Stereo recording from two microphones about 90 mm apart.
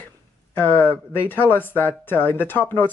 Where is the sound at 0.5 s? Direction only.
20° left (ahead or behind).